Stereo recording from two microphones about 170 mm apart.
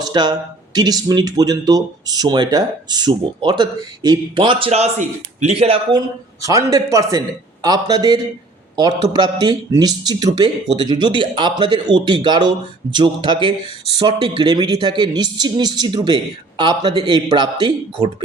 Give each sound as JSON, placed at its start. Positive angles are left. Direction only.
{"t": 0.0, "sound": "speech", "side_deg": -25}
{"t": 6.4, "sound": "speech", "side_deg": -20}